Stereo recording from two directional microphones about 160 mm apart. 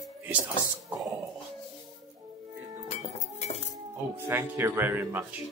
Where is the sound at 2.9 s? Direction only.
45° left (ahead or behind).